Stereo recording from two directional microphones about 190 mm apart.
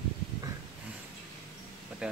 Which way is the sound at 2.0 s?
5° right (ahead or behind).